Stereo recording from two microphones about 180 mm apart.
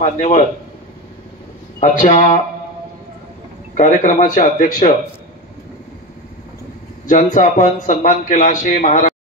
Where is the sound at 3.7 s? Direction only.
45° left (ahead or behind).